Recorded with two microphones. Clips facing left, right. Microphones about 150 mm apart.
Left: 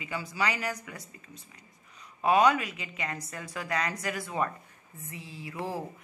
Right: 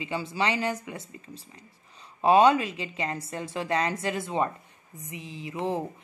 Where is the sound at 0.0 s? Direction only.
25° right (ahead or behind).